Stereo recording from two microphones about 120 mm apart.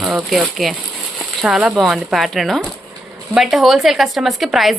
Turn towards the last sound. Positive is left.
turn(degrees=0)  # may be behind; listen again after turning